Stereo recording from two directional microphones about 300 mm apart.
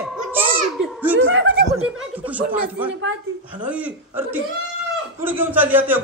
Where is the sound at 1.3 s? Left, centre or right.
Right.